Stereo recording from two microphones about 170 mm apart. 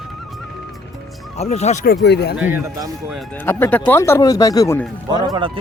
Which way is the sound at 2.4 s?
10° right (ahead or behind).